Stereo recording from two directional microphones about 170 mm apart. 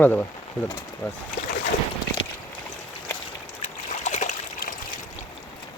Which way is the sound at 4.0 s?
45° left (ahead or behind).